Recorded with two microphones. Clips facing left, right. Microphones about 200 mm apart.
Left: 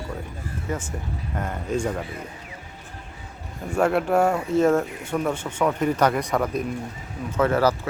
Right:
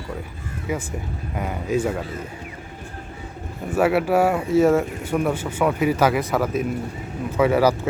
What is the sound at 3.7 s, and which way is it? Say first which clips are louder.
Speech: right 2 dB; 5° right (ahead or behind).